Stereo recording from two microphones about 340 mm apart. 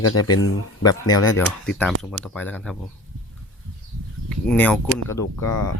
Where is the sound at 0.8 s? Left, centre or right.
Centre.